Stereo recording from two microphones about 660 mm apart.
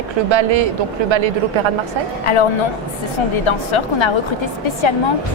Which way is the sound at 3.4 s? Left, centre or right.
Left.